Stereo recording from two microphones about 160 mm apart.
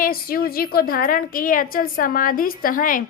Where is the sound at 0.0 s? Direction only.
65° left (ahead or behind).